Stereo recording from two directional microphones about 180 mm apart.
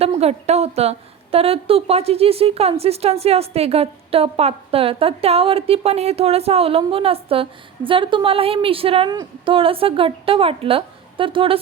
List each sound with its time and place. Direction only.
0.0 s a woman's voice: 35° right (ahead or behind)